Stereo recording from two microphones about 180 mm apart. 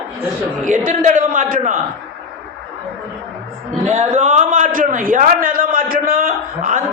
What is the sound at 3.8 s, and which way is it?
A man's voice, 40° right (ahead or behind).